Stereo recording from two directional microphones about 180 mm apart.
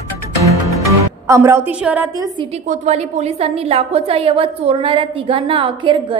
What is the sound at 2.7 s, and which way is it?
A woman's voice, 40° right (ahead or behind).